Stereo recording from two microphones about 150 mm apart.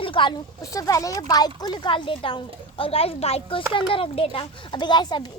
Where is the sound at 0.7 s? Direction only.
20° left (ahead or behind).